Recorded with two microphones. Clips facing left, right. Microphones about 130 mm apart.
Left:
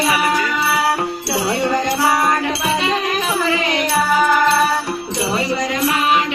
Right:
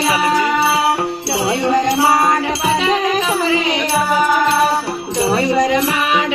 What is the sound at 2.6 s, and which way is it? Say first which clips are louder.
Music: right 3 dB; 35° right (ahead or behind).